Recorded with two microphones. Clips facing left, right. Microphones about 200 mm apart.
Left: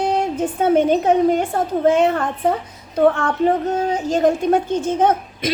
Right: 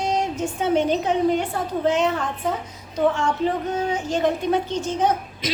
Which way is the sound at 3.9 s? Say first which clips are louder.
Left 6 dB; 40° left (ahead or behind).